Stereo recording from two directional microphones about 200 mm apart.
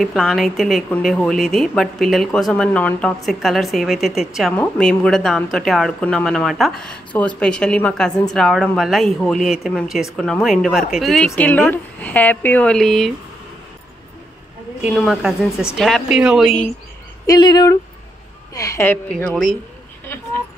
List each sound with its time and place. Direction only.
0.0 s a woman's voice: centre (ahead or behind)
14.8 s a woman's voice: centre (ahead or behind)
17.3 s a woman's voice: 20° left (ahead or behind); by 19.5 s 5° left (ahead or behind)